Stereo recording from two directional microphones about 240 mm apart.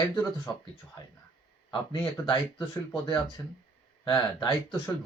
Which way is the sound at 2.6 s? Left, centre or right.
Centre.